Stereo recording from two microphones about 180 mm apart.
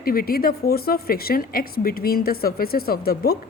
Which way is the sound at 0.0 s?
55° left (ahead or behind).